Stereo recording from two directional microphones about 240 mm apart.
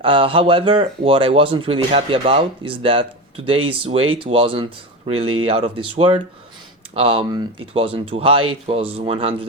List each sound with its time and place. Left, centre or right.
0.0 s speech: right